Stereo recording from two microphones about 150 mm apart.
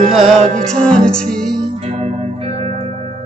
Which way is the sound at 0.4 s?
50° right (ahead or behind).